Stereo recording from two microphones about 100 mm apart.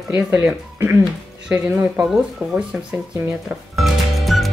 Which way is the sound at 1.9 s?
Centre (ahead or behind).